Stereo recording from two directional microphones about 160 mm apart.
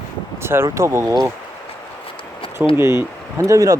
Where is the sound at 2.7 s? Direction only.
15° right (ahead or behind).